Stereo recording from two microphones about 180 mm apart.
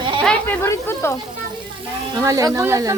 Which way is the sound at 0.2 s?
5° left (ahead or behind).